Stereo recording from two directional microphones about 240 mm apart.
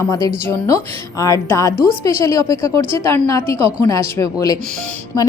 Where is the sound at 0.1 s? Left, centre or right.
Centre.